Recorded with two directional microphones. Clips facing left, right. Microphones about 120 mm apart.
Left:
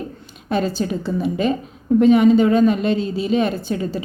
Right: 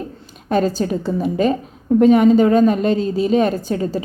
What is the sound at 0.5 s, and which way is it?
A woman's voice, 45° right (ahead or behind).